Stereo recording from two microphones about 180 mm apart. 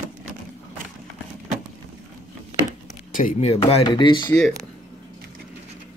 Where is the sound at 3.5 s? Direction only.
35° left (ahead or behind).